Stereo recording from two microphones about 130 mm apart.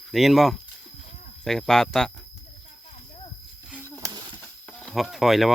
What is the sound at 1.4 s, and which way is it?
Speech, 5° left (ahead or behind).